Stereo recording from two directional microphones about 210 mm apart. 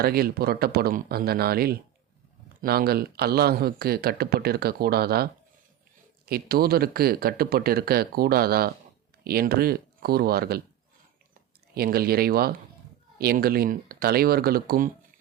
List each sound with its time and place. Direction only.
0.0 s speech: 45° right (ahead or behind)
11.7 s speech: 45° right (ahead or behind)